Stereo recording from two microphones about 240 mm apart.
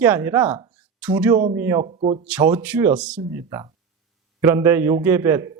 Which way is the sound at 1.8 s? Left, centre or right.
Right.